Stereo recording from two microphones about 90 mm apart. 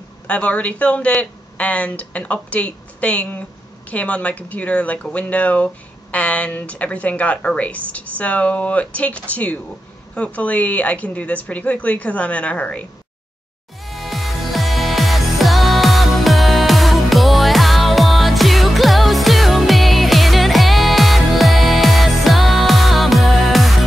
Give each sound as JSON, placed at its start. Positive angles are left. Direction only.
{"t": 0.3, "sound": "speech", "side_deg": 15}
{"t": 13.8, "sound": "music", "side_deg": 0}